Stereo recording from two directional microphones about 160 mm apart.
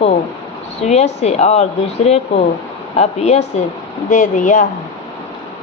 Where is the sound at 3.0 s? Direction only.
45° left (ahead or behind).